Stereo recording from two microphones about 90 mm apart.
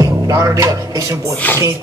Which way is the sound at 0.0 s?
40° right (ahead or behind).